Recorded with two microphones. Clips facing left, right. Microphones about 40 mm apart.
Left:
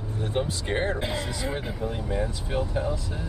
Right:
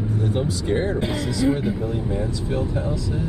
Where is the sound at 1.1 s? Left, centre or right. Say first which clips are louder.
Right 6 dB; left.